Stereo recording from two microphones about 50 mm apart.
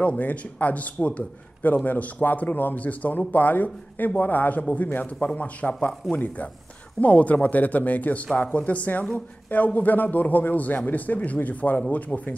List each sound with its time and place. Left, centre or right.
0.0 s a man's voice: left